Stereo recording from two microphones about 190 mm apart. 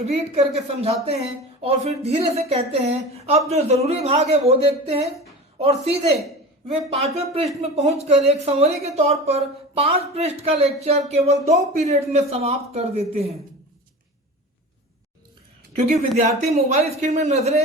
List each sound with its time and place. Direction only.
0.0 s speech: 35° right (ahead or behind)
7.6 s speech: 35° right (ahead or behind)
15.7 s speech: 35° right (ahead or behind)